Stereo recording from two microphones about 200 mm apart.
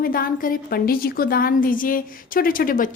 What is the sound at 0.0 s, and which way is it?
A woman's voice, 45° left (ahead or behind).